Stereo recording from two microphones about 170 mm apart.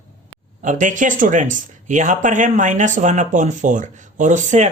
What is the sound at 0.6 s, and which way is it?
Speech, 50° right (ahead or behind).